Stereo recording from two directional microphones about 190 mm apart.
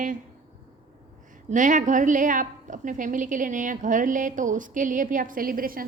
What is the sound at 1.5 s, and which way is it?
A woman's voice, 40° right (ahead or behind).